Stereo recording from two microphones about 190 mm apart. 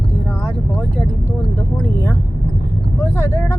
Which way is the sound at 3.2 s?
15° left (ahead or behind).